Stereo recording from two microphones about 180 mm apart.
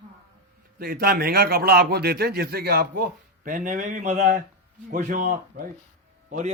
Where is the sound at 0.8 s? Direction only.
55° right (ahead or behind).